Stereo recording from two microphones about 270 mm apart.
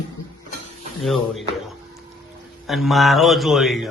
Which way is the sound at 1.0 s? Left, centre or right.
Centre.